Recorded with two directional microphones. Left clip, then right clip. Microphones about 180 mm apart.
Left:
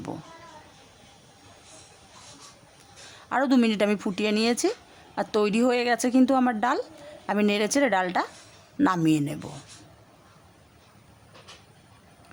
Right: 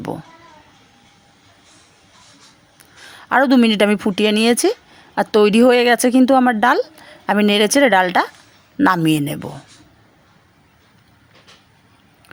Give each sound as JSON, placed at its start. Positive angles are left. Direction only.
{"t": 3.1, "sound": "a woman's voice", "side_deg": -30}